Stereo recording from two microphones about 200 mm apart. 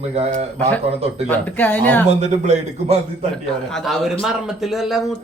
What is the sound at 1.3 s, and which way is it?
Speech, 10° left (ahead or behind).